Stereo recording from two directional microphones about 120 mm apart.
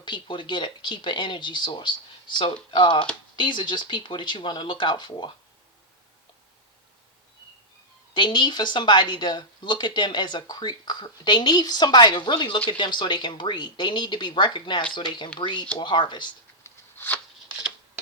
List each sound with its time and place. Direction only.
0.0 s speech: 40° left (ahead or behind)
8.1 s speech: 40° left (ahead or behind)
16.6 s a sound: 20° left (ahead or behind)